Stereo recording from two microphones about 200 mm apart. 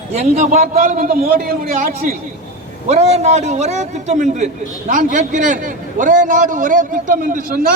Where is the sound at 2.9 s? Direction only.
35° right (ahead or behind).